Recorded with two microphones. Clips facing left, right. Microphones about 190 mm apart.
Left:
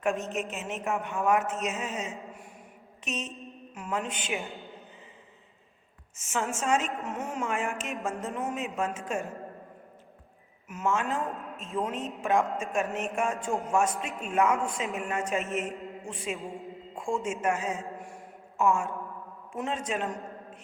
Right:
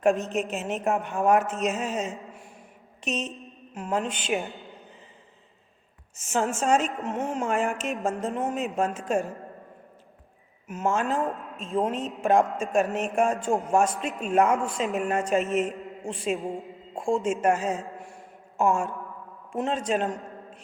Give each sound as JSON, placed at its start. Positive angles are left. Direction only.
{"t": 0.0, "sound": "a woman's voice", "side_deg": -35}
{"t": 6.1, "sound": "a woman's voice", "side_deg": -35}
{"t": 7.7, "sound": "a woman's voice", "side_deg": 0}
{"t": 8.2, "sound": "a woman's voice", "side_deg": -35}
{"t": 10.7, "sound": "a woman's voice", "side_deg": -30}
{"t": 18.5, "sound": "a sound", "side_deg": -35}
{"t": 19.5, "sound": "a woman's voice", "side_deg": -35}